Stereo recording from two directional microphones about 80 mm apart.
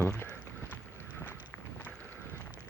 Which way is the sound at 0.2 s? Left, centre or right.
Left.